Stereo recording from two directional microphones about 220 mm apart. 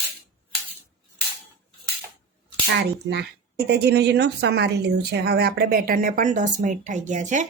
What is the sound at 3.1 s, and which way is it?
A woman's voice, 50° right (ahead or behind).